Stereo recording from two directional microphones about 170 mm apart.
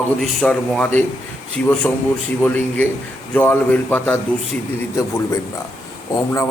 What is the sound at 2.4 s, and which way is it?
A man's voice, 10° left (ahead or behind).